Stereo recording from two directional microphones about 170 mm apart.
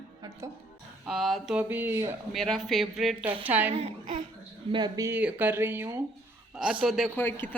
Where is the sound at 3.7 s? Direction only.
35° right (ahead or behind).